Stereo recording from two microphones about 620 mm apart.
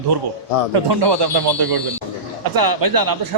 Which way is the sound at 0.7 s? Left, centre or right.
Right.